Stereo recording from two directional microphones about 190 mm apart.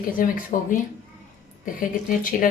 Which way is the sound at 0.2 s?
50° left (ahead or behind).